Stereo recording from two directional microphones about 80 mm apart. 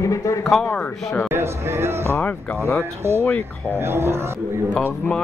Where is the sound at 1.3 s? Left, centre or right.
Right.